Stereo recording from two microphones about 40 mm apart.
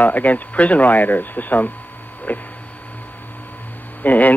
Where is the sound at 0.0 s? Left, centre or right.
Left.